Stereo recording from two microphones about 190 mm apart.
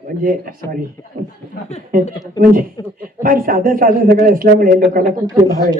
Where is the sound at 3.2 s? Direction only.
50° right (ahead or behind).